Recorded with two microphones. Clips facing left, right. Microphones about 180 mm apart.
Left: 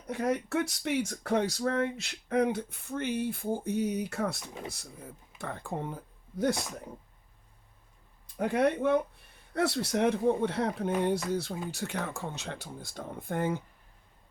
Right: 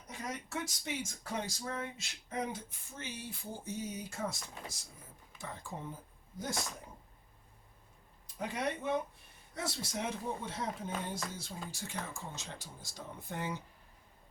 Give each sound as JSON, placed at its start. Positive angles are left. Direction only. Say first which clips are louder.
{"t": 0.1, "sound": "speech", "louder": "left 12 dB", "side_deg": 60}
{"t": 8.4, "sound": "speech", "louder": "left 10 dB", "side_deg": 60}